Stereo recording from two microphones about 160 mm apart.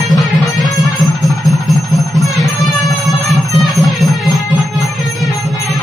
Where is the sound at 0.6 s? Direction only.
25° left (ahead or behind).